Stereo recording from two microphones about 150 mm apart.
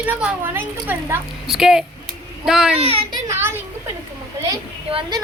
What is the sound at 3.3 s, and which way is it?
Speech, 15° right (ahead or behind).